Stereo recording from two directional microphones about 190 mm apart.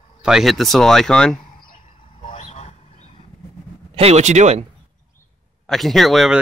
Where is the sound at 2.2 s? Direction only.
35° left (ahead or behind).